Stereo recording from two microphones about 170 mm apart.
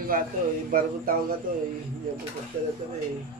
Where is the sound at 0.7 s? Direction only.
55° right (ahead or behind).